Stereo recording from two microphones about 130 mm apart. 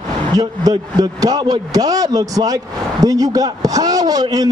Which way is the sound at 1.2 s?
30° right (ahead or behind).